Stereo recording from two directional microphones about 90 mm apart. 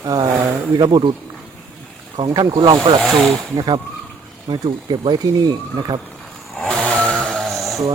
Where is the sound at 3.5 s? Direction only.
65° right (ahead or behind).